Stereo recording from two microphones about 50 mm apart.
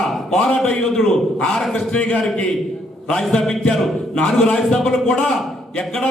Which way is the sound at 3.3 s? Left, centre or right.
Centre.